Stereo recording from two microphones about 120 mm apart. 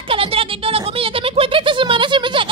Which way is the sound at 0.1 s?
50° right (ahead or behind).